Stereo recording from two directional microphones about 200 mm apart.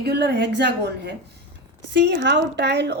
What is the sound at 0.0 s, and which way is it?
Speech, 55° right (ahead or behind).